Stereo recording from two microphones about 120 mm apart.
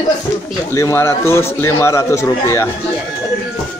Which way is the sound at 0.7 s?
20° left (ahead or behind).